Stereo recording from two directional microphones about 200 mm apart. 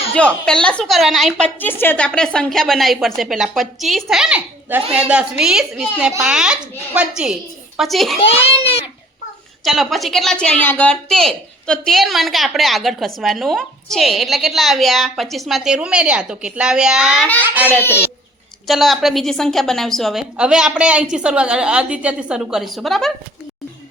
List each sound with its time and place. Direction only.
0.1 s a woman's voice: 5° left (ahead or behind)
8.2 s a child's voice: 30° left (ahead or behind)
9.6 s a woman's voice: centre (ahead or behind)
17.7 s speech: 10° left (ahead or behind)
18.7 s a woman's voice: centre (ahead or behind)